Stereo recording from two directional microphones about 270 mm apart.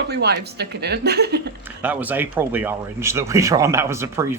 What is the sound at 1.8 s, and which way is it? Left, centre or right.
Speech, centre.